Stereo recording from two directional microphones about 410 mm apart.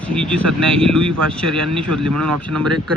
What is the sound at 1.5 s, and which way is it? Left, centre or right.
Speech, right.